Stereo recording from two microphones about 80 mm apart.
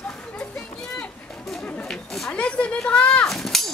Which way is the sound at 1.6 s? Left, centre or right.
Centre.